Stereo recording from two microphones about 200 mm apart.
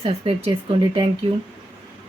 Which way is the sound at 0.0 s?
30° right (ahead or behind).